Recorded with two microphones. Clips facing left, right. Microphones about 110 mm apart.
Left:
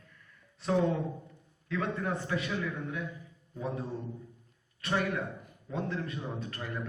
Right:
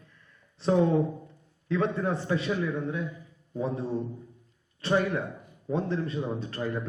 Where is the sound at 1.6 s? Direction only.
30° right (ahead or behind).